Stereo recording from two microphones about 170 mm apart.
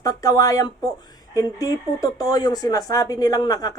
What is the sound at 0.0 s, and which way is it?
Speech, 20° left (ahead or behind).